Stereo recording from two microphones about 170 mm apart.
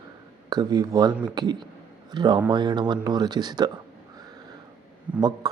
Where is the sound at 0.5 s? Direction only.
25° right (ahead or behind).